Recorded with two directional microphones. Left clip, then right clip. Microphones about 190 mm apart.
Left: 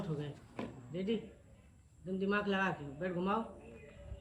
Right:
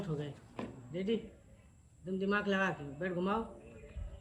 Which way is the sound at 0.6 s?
10° left (ahead or behind).